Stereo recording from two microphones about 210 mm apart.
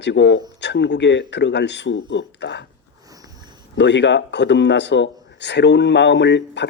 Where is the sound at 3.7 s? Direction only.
55° left (ahead or behind).